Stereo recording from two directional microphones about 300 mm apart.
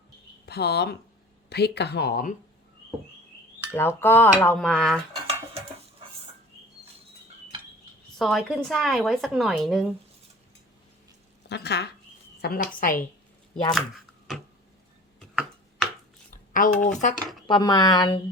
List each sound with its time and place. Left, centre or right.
0.4 s speech: left
3.7 s dishes: centre
5.1 s a sound: centre
8.2 s speech: centre
11.4 s a woman's voice: left
16.5 s speech: left